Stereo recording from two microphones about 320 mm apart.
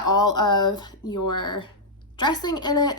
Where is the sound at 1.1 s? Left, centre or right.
Left.